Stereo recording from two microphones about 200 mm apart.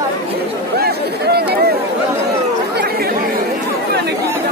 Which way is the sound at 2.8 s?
50° right (ahead or behind).